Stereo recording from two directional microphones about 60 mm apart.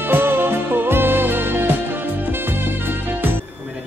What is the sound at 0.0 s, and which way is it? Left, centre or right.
Music, right.